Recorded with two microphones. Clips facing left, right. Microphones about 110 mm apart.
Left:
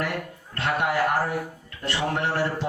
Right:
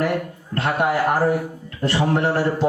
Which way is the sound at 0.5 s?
35° right (ahead or behind).